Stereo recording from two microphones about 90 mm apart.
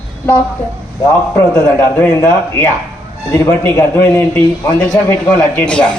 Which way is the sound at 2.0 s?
20° left (ahead or behind).